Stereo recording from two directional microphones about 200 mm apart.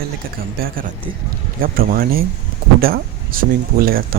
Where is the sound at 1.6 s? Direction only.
45° right (ahead or behind).